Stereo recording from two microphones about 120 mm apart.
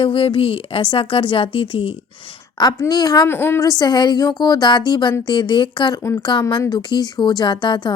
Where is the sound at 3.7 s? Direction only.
35° left (ahead or behind).